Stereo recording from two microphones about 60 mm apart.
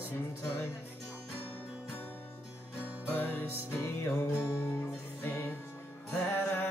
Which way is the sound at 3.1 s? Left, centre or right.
Left.